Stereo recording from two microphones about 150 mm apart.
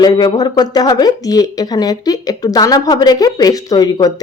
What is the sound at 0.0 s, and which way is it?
Speech, 30° left (ahead or behind).